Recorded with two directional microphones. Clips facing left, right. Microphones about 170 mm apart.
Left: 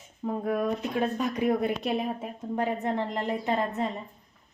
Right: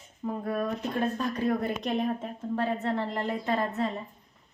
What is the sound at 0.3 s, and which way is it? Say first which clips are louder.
Speech: left 3 dB; 15° left (ahead or behind).